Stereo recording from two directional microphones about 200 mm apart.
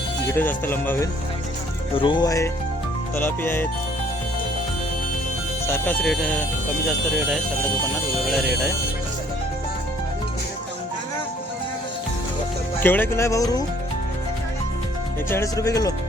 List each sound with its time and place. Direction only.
0.3 s speech: 10° left (ahead or behind)
2.0 s speech: 25° left (ahead or behind)
5.6 s speech: 10° left (ahead or behind)
12.8 s speech: 10° left (ahead or behind)
15.3 s speech: 15° left (ahead or behind)